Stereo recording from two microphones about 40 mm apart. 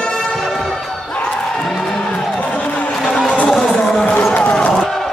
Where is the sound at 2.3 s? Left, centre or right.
Left.